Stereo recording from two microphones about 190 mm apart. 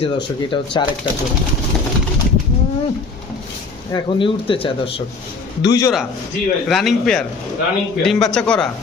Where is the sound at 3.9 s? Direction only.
25° left (ahead or behind).